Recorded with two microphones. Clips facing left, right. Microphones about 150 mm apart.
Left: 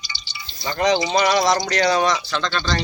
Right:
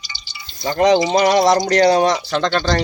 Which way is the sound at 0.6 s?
50° right (ahead or behind).